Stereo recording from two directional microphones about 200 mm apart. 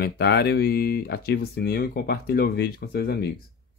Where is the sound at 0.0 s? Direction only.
55° left (ahead or behind).